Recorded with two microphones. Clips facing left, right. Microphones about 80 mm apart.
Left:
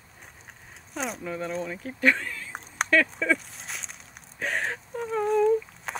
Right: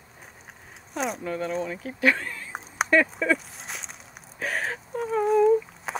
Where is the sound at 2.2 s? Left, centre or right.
Right.